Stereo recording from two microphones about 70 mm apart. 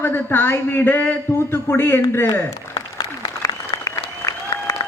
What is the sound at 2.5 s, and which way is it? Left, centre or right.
Applause, left.